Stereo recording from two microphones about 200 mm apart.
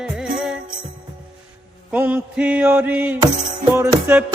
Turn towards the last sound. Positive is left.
turn(degrees=-10)  # may be behind; listen again after turning